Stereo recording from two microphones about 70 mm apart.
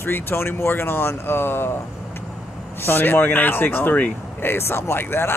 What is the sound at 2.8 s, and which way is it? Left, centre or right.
Speech, left.